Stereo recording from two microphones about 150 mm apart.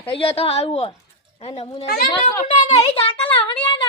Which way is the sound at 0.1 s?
40° left (ahead or behind).